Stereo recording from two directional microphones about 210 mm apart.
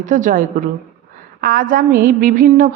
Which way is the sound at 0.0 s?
40° right (ahead or behind).